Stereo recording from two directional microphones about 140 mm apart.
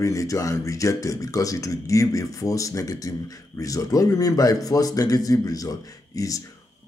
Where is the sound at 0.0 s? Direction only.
25° left (ahead or behind).